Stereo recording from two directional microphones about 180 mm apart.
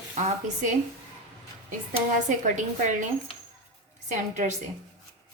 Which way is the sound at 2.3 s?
45° right (ahead or behind).